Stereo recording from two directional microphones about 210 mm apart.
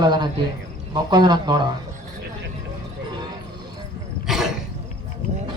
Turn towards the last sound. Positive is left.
turn(degrees=0)  # may be behind; listen again after turning